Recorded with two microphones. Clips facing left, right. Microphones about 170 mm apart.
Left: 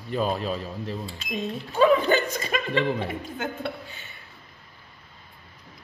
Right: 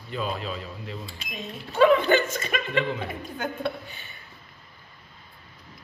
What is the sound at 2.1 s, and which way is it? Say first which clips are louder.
Speech: right 1 dB; 35° left (ahead or behind).